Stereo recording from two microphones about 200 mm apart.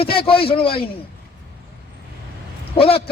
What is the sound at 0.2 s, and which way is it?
Speech, 25° left (ahead or behind).